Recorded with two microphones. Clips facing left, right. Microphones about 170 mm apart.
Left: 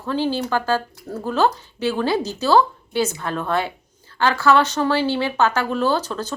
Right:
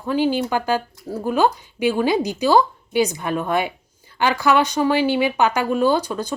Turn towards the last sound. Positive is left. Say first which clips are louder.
# right 2 dB
turn(degrees=-15)  # may be behind; listen again after turning